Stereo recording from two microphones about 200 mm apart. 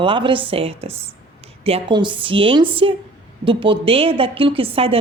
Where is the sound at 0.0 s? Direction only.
25° right (ahead or behind).